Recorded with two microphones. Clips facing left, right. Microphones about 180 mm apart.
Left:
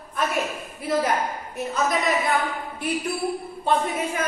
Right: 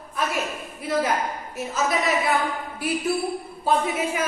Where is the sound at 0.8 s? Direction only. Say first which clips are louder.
Left 1 dB; centre (ahead or behind).